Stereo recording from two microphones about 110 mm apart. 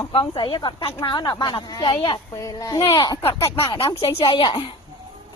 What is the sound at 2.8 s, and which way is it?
Speech, 45° left (ahead or behind).